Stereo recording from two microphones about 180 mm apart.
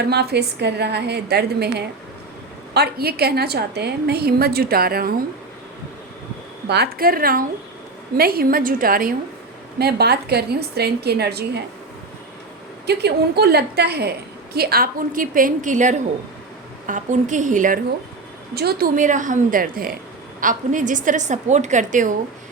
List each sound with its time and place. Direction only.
0.0 s a woman's voice: 65° right (ahead or behind)
6.7 s a woman's voice: 60° right (ahead or behind)
12.8 s a woman's voice: 65° right (ahead or behind); by 17.7 s 45° right (ahead or behind)
18.5 s a woman's voice: 60° right (ahead or behind)